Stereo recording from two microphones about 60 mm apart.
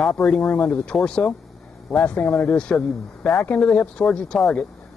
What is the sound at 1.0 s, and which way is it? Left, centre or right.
Speech, centre.